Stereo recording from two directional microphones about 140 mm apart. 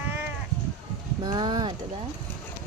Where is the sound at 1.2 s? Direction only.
30° right (ahead or behind).